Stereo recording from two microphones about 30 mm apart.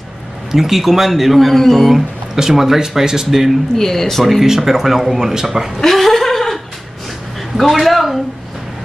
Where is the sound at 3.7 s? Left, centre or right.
Centre.